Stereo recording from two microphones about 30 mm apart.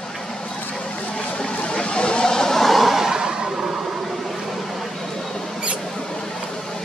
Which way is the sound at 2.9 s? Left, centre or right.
Centre.